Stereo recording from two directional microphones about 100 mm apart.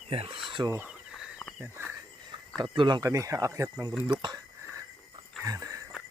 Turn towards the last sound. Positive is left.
turn(degrees=-35)  # may be behind; listen again after turning